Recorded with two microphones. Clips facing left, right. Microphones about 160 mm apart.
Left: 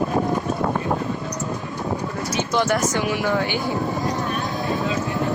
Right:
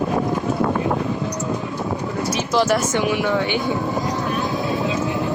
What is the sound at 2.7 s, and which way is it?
Speech, 25° right (ahead or behind).